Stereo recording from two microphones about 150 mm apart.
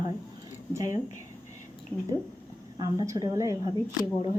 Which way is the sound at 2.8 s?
25° right (ahead or behind).